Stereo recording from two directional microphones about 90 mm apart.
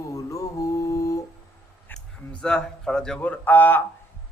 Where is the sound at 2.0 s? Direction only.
5° left (ahead or behind).